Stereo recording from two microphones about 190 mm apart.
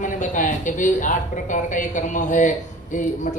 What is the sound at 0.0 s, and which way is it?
Speech, 40° left (ahead or behind).